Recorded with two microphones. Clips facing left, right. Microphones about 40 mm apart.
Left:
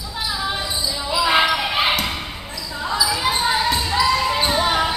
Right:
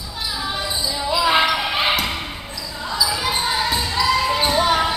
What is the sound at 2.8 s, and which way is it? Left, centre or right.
Basketball bounce, centre.